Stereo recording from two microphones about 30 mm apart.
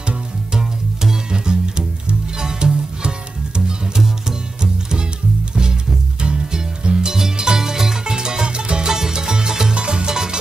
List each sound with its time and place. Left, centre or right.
0.6 s music: right
6.2 s music: right; by 8.0 s centre
8.0 s music: right
8.9 s music: centre
9.8 s music: right